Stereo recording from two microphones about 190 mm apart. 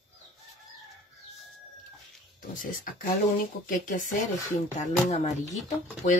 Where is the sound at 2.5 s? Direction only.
45° left (ahead or behind).